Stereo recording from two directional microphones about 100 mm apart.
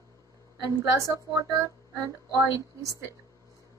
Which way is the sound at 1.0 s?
30° right (ahead or behind).